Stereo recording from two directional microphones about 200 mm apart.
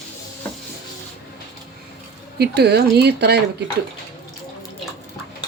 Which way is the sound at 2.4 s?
55° right (ahead or behind).